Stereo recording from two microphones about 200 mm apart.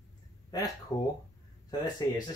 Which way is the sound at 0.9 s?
20° left (ahead or behind).